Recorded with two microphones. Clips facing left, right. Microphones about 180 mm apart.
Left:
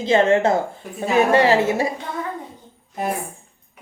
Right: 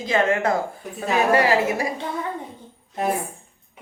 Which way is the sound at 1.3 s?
25° left (ahead or behind).